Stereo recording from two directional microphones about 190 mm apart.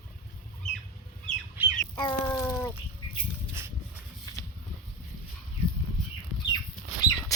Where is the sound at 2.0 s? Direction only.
20° left (ahead or behind).